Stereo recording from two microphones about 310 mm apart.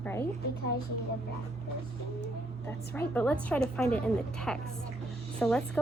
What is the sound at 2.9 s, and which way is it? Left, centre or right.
A woman's voice, centre.